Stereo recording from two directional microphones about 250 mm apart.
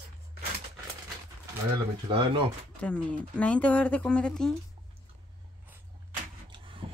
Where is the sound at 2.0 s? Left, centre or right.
Centre.